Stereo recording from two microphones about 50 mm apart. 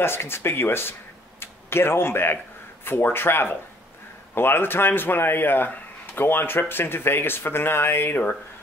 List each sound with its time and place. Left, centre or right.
0.0 s speech: left